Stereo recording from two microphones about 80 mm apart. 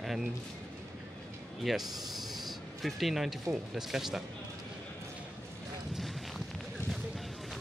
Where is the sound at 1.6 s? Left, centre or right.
Centre.